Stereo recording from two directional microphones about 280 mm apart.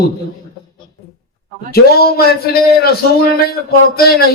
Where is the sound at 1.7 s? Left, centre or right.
Left.